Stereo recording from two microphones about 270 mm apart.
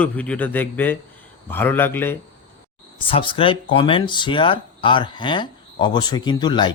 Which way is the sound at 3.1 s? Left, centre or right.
Centre.